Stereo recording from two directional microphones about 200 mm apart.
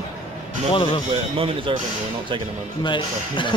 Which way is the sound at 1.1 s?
25° right (ahead or behind).